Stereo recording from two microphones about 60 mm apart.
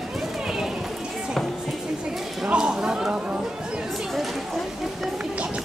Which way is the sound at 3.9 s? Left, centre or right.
Centre.